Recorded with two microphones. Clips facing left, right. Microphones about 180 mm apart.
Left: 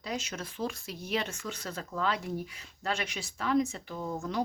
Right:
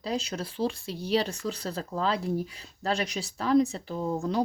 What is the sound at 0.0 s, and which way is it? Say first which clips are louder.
Speech: right 5 dB; 35° right (ahead or behind).